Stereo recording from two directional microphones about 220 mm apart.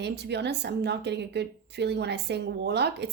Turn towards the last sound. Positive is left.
turn(degrees=-50)  # may be behind; listen again after turning